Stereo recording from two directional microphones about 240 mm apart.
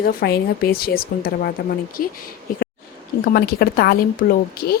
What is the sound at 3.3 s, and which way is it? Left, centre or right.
A woman's voice, left.